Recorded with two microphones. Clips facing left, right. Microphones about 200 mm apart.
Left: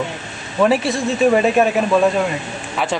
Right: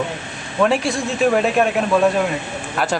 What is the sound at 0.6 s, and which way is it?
Speech, centre (ahead or behind).